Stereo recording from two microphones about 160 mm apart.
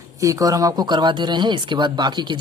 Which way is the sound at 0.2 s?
20° right (ahead or behind).